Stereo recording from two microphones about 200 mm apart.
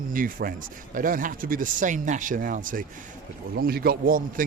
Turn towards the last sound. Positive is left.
turn(degrees=-45)  # may be behind; listen again after turning